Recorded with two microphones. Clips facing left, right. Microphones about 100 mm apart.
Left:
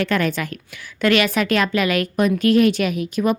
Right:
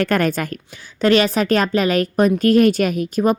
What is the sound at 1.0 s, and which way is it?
A woman's voice, 35° right (ahead or behind).